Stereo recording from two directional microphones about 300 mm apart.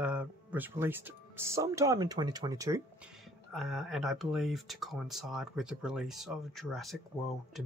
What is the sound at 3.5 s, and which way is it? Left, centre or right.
Speech, centre.